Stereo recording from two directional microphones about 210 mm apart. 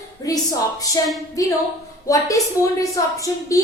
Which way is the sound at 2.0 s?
15° left (ahead or behind).